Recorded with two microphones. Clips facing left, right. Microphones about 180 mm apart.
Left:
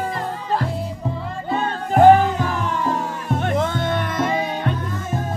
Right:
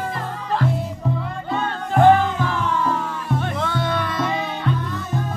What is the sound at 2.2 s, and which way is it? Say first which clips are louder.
Music: left 1 dB; 40° left (ahead or behind).